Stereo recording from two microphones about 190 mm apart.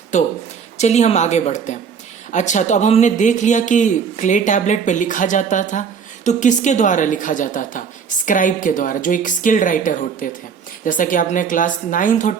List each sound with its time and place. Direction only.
0.1 s a woman's voice: 40° left (ahead or behind)